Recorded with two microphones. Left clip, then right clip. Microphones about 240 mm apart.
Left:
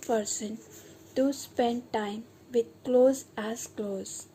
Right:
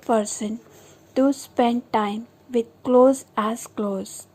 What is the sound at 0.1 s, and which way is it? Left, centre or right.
A woman's voice, right.